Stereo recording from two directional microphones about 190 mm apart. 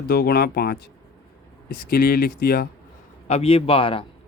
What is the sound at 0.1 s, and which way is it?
Speech, 55° left (ahead or behind).